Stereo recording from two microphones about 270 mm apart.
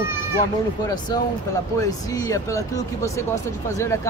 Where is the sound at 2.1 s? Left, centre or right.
Centre.